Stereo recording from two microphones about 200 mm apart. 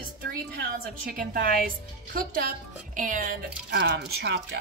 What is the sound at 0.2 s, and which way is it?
A woman's voice, 50° right (ahead or behind).